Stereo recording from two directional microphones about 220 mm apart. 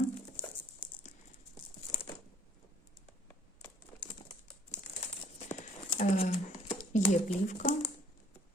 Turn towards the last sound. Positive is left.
turn(degrees=30)  # may be behind; listen again after turning